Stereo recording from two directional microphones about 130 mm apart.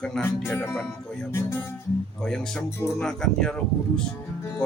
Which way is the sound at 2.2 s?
5° left (ahead or behind).